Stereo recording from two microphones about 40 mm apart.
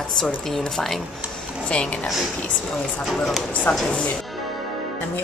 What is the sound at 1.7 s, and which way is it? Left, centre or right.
Speech, left.